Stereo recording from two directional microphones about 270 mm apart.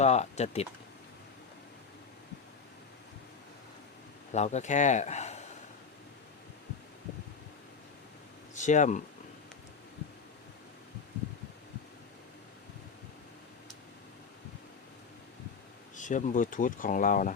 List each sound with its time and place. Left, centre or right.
0.0 s speech: left
4.3 s speech: left
8.5 s speech: left
16.0 s speech: left